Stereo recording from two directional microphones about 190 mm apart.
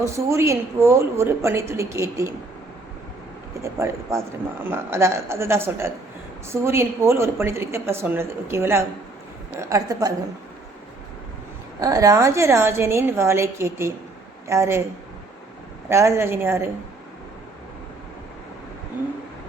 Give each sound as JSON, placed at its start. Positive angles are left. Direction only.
{"t": 0.0, "sound": "a woman's voice", "side_deg": -15}
{"t": 3.6, "sound": "a woman's voice", "side_deg": -15}
{"t": 11.8, "sound": "a woman's voice", "side_deg": -20}
{"t": 15.9, "sound": "a woman's voice", "side_deg": -15}